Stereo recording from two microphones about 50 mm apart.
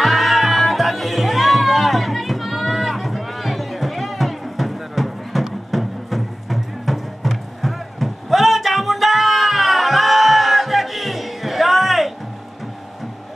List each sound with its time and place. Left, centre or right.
0.0 s music: centre